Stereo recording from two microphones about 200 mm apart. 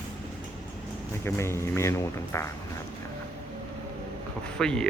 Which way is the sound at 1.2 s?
15° left (ahead or behind).